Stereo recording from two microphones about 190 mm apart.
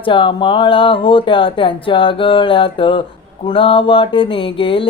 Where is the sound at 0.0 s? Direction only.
25° left (ahead or behind).